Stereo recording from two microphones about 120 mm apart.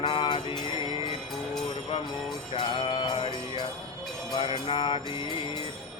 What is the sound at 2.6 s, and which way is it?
Music, 45° left (ahead or behind).